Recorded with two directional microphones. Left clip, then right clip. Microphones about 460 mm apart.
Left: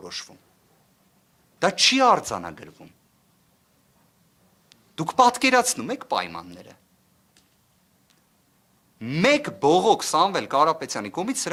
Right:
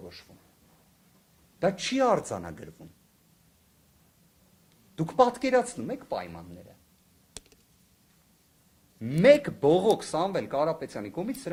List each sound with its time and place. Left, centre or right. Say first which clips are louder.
1.5 s speech: left 7 dB; left
4.9 s speech: left 5 dB; left
9.0 s speech: right 1 dB; left